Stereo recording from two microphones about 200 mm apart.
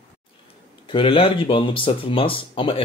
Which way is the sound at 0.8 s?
25° left (ahead or behind).